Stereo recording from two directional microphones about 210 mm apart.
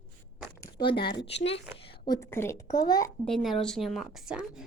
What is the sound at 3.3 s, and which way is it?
A woman's voice, centre (ahead or behind).